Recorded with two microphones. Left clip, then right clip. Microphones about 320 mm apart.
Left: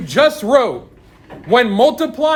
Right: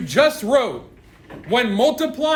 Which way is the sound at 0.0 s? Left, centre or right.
Centre.